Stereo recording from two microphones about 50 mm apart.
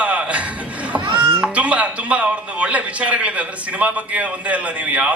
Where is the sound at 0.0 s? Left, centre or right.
Right.